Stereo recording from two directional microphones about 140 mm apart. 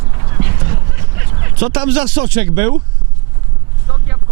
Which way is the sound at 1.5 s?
15° right (ahead or behind).